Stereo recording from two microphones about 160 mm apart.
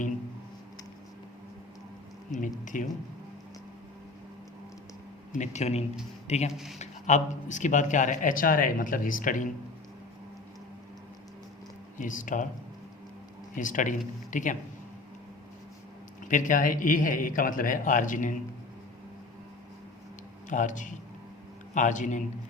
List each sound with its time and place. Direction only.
2.4 s speech: 55° left (ahead or behind)
5.4 s speech: 45° left (ahead or behind)
6.5 s speech: centre (ahead or behind)
6.7 s speech: 50° left (ahead or behind)
11.9 s speech: 55° left (ahead or behind)
13.6 s speech: 55° left (ahead or behind)
16.3 s speech: 55° left (ahead or behind)
20.5 s speech: 50° left (ahead or behind)